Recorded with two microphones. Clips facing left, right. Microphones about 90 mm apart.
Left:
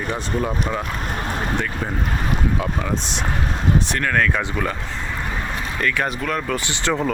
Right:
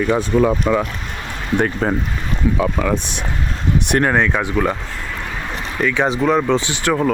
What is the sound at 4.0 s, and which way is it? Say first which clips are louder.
Speech: right 6 dB; 25° right (ahead or behind).